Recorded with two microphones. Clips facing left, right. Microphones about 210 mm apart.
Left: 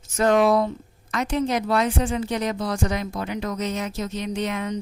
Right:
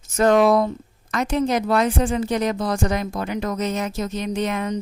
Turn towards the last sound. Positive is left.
turn(degrees=-45)  # may be behind; listen again after turning